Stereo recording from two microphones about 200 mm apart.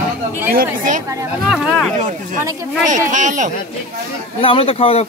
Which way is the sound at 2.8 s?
40° right (ahead or behind).